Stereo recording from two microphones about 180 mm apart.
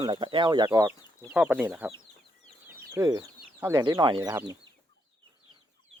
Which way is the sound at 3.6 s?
15° right (ahead or behind).